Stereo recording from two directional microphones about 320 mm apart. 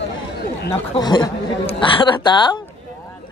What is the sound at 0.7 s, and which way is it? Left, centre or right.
A woman's voice, centre.